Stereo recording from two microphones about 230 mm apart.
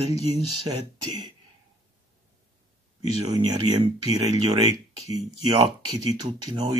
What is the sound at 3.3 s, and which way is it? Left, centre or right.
Speech, centre.